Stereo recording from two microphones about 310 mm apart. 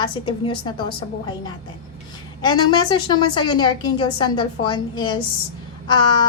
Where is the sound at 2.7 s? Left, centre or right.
Centre.